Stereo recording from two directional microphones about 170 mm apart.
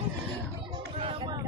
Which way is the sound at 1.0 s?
30° right (ahead or behind).